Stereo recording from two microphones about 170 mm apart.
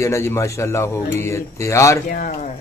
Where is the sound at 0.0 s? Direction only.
15° left (ahead or behind).